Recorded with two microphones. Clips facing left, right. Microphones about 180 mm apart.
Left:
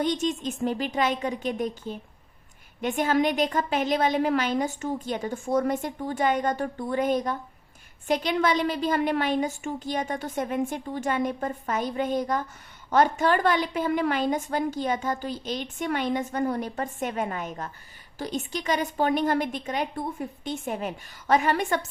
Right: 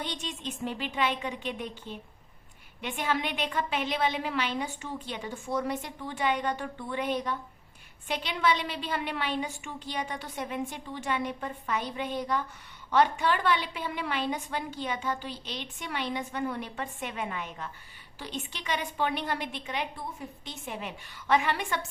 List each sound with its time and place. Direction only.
0.0 s a woman's voice: 45° left (ahead or behind)